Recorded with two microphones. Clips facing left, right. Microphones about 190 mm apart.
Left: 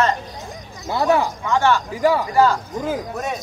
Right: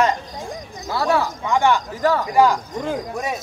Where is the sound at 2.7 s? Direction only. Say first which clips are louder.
Left 1 dB; 5° left (ahead or behind).